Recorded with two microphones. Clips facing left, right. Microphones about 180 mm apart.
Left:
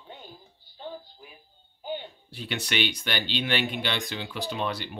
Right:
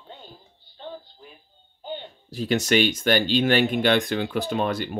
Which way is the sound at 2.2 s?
40° right (ahead or behind).